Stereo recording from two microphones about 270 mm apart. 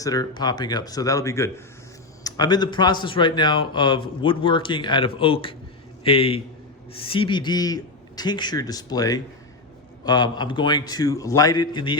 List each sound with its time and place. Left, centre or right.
0.0 s a man's voice: centre